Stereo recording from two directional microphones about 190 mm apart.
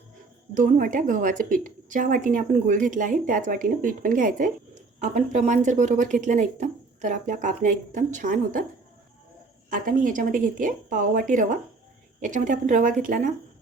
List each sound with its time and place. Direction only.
0.5 s a woman's voice: 45° right (ahead or behind)
9.6 s a woman's voice: 45° right (ahead or behind)